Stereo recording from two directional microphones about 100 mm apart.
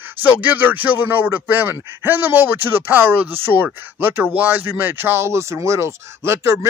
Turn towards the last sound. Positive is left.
turn(degrees=-25)  # may be behind; listen again after turning